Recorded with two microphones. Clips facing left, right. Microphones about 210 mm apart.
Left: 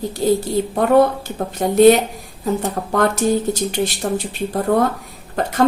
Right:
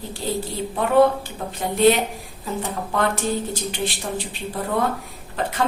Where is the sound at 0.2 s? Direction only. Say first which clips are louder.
Left 10 dB; 45° left (ahead or behind).